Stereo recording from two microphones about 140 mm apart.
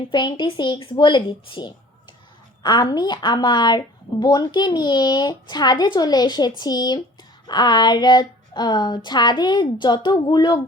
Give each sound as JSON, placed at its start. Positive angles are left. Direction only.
{"t": 0.1, "sound": "a woman's voice", "side_deg": 35}